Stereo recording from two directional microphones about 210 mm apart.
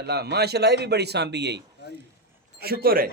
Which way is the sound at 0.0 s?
50° right (ahead or behind).